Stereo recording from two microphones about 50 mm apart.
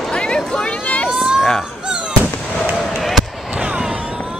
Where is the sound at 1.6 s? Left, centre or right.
Centre.